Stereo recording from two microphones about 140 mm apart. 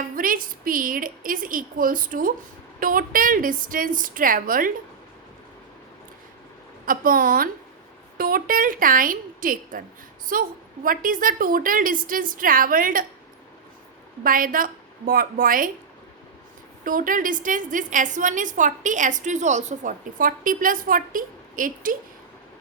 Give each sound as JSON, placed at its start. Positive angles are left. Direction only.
{"t": 0.2, "sound": "a woman's voice", "side_deg": -85}
{"t": 6.8, "sound": "a woman's voice", "side_deg": -90}
{"t": 14.3, "sound": "a woman's voice", "side_deg": -80}
{"t": 16.8, "sound": "a woman's voice", "side_deg": -75}